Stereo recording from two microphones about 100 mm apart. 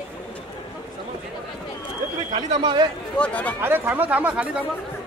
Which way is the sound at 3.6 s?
20° right (ahead or behind).